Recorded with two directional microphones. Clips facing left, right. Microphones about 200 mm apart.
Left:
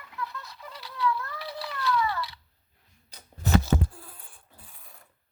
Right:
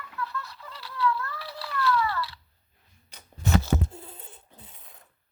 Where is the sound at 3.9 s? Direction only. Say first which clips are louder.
Right 5 dB; 25° right (ahead or behind).